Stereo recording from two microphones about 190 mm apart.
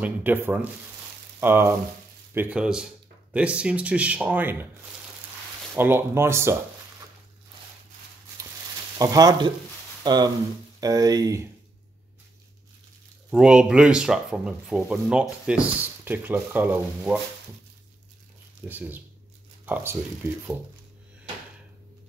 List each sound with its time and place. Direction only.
0.0 s speech: 10° right (ahead or behind)
5.8 s speech: 10° right (ahead or behind)
8.9 s speech: 20° right (ahead or behind)
13.3 s speech: 5° right (ahead or behind)
18.7 s speech: 10° right (ahead or behind)